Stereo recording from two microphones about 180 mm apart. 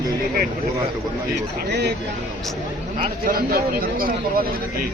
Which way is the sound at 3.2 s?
55° right (ahead or behind).